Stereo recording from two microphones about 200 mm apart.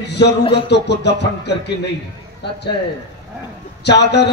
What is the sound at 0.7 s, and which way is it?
Music, 60° left (ahead or behind).